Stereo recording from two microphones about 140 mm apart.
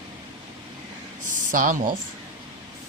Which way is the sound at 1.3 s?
70° right (ahead or behind).